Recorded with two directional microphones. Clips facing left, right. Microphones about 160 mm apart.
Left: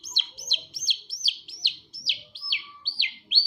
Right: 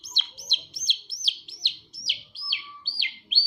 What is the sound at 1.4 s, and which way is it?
Chirp, 10° left (ahead or behind).